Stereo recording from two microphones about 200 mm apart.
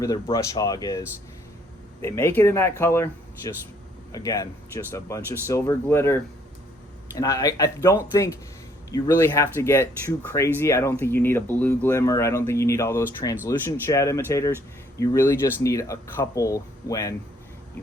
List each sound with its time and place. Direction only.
0.0 s speech: 15° left (ahead or behind)
7.2 s speech: 15° left (ahead or behind)